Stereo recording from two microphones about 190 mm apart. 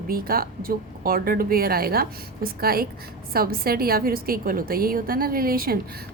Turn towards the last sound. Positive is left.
turn(degrees=-50)  # may be behind; listen again after turning